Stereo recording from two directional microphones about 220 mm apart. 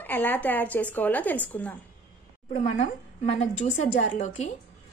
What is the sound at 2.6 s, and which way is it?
A woman's voice, 30° left (ahead or behind).